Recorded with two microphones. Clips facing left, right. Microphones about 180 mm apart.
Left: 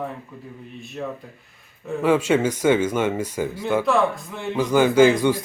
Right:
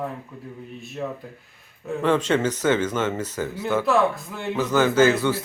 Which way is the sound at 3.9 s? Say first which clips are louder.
Even; centre (ahead or behind).